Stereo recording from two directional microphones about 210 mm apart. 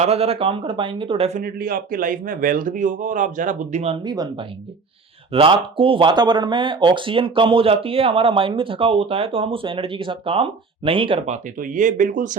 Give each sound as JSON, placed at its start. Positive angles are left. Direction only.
{"t": 0.0, "sound": "speech", "side_deg": -30}
{"t": 4.0, "sound": "speech", "side_deg": -20}
{"t": 11.5, "sound": "speech", "side_deg": -40}